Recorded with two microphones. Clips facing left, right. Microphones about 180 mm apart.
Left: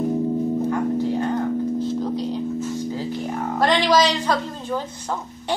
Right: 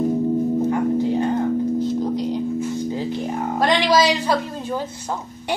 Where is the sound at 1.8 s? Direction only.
15° right (ahead or behind).